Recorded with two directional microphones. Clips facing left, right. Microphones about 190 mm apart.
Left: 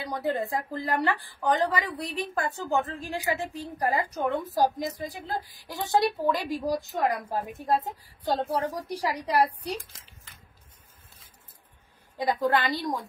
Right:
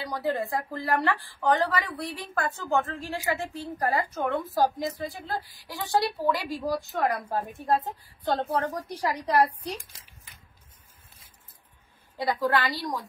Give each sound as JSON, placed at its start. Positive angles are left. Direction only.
{"t": 0.0, "sound": "a woman's voice", "side_deg": 20}
{"t": 12.2, "sound": "speech", "side_deg": 20}